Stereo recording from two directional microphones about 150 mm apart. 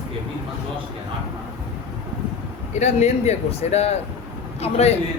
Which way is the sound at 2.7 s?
50° left (ahead or behind).